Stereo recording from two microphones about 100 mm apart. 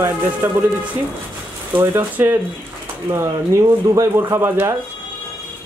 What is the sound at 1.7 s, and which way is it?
Speech, 20° right (ahead or behind).